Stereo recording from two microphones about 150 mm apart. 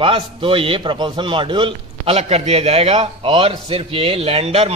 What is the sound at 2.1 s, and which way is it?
A man's voice, 45° right (ahead or behind).